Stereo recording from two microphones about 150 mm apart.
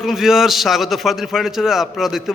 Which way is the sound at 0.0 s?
5° right (ahead or behind).